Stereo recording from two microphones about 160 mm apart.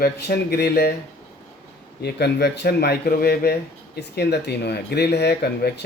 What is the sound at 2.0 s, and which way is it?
A man's voice, 90° left.